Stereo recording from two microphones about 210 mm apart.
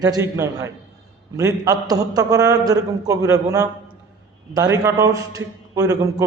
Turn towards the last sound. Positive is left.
turn(degrees=-15)  # may be behind; listen again after turning